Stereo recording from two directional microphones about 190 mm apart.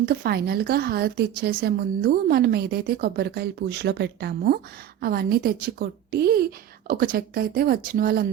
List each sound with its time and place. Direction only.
0.0 s a woman's voice: 55° right (ahead or behind)